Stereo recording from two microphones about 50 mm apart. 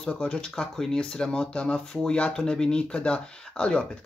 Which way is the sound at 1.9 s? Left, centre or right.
Centre.